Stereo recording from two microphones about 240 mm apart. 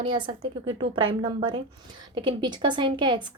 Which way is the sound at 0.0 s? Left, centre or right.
Right.